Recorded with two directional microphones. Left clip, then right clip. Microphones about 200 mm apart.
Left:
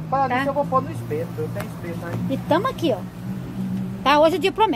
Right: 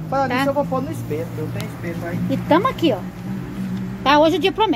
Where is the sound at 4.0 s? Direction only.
5° left (ahead or behind).